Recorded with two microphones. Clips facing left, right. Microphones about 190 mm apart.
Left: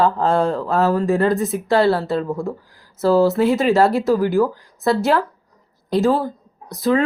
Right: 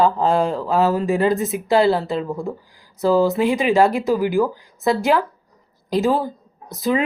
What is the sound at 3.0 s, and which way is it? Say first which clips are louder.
Speech: left 2 dB; centre (ahead or behind).